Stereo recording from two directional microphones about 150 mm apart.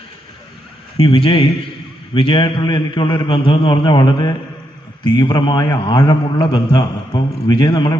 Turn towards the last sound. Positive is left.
turn(degrees=30)  # may be behind; listen again after turning